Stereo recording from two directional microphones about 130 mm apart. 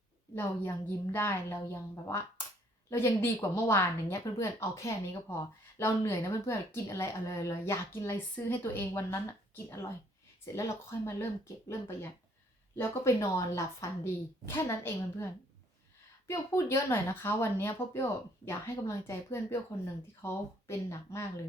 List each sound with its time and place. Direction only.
0.3 s speech: 20° left (ahead or behind)